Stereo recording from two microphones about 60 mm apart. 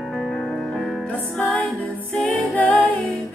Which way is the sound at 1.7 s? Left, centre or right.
Centre.